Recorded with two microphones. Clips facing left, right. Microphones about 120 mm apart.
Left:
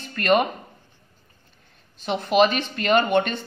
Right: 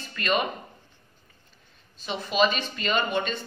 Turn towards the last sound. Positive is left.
turn(degrees=60)  # may be behind; listen again after turning